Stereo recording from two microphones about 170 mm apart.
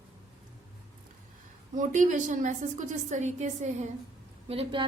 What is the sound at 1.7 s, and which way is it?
A woman's voice, 50° right (ahead or behind).